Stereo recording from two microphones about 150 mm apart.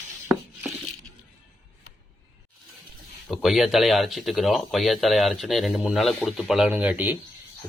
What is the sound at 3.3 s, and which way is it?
Speech, centre (ahead or behind).